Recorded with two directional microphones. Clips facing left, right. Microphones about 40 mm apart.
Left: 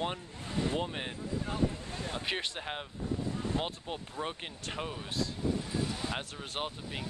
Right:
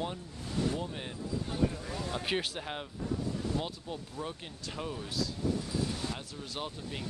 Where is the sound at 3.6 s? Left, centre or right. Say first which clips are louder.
Left 1 dB; left.